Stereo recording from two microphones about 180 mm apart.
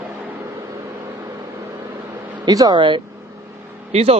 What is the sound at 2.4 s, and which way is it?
Speech, 20° right (ahead or behind).